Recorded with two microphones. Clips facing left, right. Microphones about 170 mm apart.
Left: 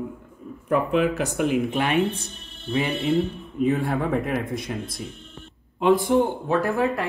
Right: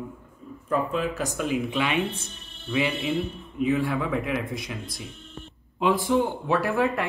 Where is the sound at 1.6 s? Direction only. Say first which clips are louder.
Left 4 dB; 45° left (ahead or behind).